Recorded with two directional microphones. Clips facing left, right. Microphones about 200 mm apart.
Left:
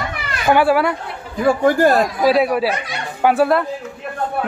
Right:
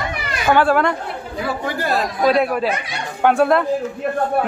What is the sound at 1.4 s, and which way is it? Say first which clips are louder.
Speech: left 10 dB; 50° left (ahead or behind).